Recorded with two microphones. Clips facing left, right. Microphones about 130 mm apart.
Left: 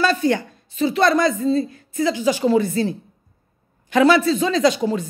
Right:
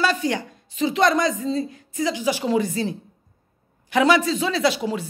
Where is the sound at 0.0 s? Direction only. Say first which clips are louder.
Left 4 dB; 15° right (ahead or behind).